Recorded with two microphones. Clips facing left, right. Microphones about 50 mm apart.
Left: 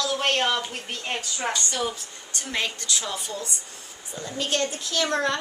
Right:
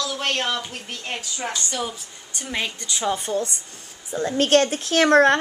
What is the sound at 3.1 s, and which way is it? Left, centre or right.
Speech, right.